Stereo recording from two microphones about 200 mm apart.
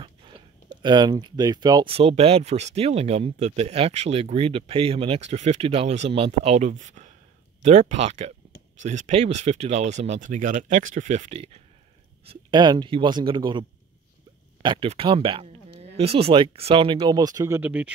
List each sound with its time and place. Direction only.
0.8 s speech: 20° right (ahead or behind)